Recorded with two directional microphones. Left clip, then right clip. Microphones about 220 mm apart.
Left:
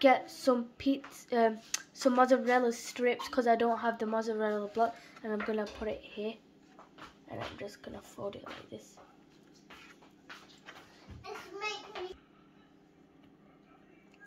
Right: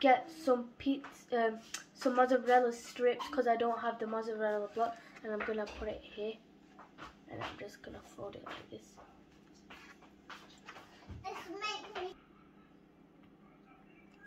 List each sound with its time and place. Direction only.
0.0 s speech: 50° left (ahead or behind)